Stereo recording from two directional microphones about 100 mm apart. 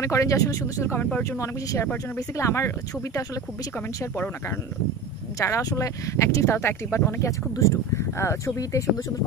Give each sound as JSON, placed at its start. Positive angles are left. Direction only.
{"t": 0.0, "sound": "speech", "side_deg": 30}
{"t": 5.4, "sound": "speech", "side_deg": 35}